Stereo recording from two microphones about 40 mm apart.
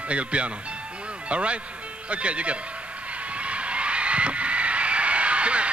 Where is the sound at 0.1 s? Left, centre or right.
Right.